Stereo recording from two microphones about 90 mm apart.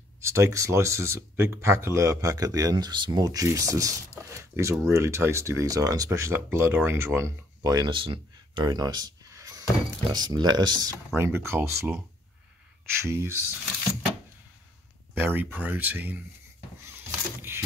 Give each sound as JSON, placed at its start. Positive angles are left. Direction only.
{"t": 0.2, "sound": "speech", "side_deg": -30}
{"t": 6.0, "sound": "speech", "side_deg": -30}
{"t": 7.6, "sound": "a sound", "side_deg": -55}
{"t": 10.1, "sound": "speech", "side_deg": -50}
{"t": 11.1, "sound": "speech", "side_deg": -25}
{"t": 13.0, "sound": "speech", "side_deg": -30}
{"t": 15.1, "sound": "speech", "side_deg": -25}
{"t": 16.9, "sound": "a sound", "side_deg": -25}